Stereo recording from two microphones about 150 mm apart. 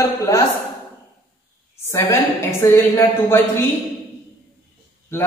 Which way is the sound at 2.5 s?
20° left (ahead or behind).